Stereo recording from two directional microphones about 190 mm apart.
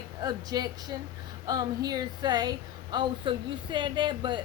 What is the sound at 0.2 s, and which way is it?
A woman's voice, 20° right (ahead or behind).